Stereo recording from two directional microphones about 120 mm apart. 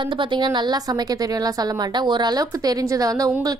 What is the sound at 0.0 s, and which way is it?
Speech, 40° right (ahead or behind).